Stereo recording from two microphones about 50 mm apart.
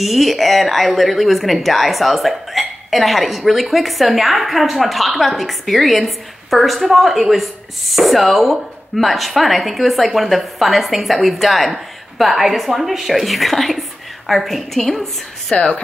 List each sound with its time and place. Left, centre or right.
0.0 s speech: centre
15.5 s speech: left